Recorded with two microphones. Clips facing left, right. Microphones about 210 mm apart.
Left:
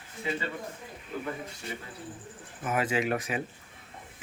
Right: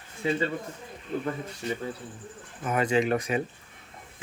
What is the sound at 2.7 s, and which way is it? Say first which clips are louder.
Speech: right 4 dB; 5° left (ahead or behind).